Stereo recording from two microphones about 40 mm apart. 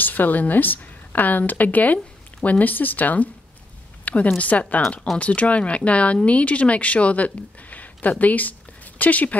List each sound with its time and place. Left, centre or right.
0.0 s speech: left
4.0 s a sound: left
4.4 s speech: left